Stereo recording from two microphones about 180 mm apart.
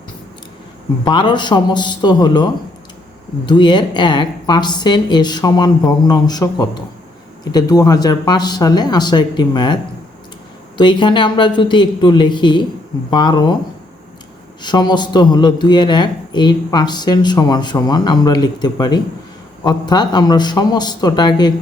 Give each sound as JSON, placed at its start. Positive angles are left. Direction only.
{"t": 1.0, "sound": "speech", "side_deg": 25}
{"t": 10.8, "sound": "speech", "side_deg": 25}
{"t": 14.6, "sound": "speech", "side_deg": 25}